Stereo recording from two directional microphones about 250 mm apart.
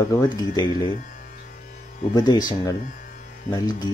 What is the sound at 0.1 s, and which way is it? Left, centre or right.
Speech, centre.